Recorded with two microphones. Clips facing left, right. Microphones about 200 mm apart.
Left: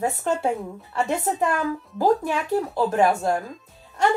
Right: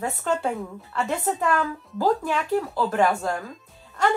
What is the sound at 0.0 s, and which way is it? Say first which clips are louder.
Speech: left 2 dB; 20° left (ahead or behind).